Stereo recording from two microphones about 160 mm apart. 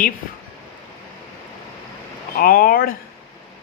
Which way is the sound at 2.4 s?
65° left (ahead or behind).